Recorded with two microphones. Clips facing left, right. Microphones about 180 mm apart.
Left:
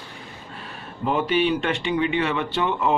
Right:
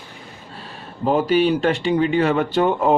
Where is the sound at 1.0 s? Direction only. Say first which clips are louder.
Right 4 dB; 40° right (ahead or behind).